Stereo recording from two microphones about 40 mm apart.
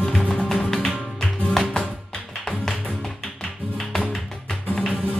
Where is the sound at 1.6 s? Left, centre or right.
Centre.